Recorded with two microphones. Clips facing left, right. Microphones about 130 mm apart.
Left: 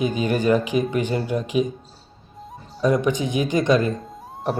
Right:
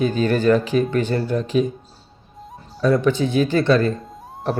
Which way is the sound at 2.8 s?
15° left (ahead or behind).